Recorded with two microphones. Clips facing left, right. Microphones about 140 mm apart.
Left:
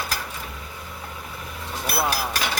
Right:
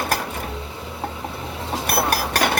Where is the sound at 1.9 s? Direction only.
55° right (ahead or behind).